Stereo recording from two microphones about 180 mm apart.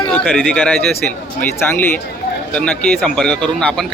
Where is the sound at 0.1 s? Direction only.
5° left (ahead or behind).